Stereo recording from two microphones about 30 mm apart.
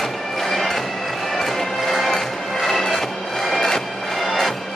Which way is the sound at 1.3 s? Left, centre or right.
Centre.